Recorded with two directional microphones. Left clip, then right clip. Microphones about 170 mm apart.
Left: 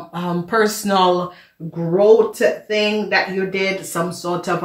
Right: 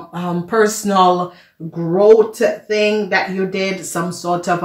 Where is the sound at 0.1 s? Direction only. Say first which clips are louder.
Right 1 dB; 25° right (ahead or behind).